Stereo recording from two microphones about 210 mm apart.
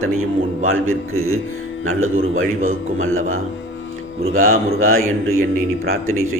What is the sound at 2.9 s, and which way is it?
Speech, 75° right (ahead or behind).